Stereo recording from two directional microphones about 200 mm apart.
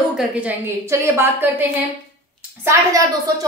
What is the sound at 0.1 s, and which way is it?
A woman's voice, 5° right (ahead or behind).